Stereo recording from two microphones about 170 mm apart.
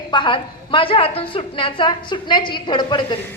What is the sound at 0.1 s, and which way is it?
A woman's voice, 30° left (ahead or behind).